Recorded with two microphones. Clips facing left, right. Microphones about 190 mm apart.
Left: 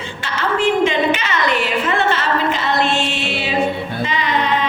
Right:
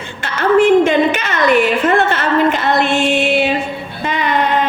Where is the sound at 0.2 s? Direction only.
55° right (ahead or behind).